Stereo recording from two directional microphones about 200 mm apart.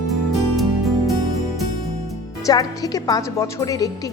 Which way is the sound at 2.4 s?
20° left (ahead or behind).